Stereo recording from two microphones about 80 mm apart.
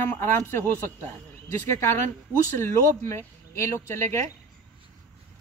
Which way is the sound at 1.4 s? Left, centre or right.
Left.